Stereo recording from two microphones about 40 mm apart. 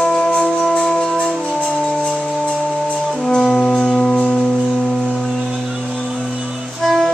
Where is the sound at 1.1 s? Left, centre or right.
Left.